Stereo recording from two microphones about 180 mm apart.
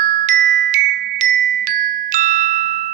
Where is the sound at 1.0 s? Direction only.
55° right (ahead or behind).